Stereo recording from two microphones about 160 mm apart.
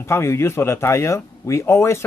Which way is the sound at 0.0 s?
15° left (ahead or behind).